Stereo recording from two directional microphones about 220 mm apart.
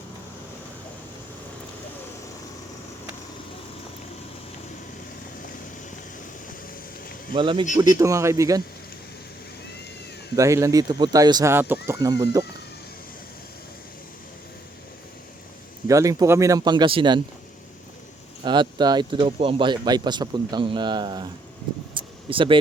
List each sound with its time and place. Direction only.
7.3 s speech: 20° right (ahead or behind)
10.3 s speech: 15° right (ahead or behind)
15.9 s speech: 15° right (ahead or behind)
18.4 s speech: 20° right (ahead or behind)
21.9 s a sound: 25° right (ahead or behind)